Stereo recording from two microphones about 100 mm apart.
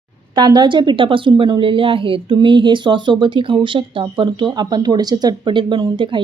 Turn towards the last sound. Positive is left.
turn(degrees=-55)  # may be behind; listen again after turning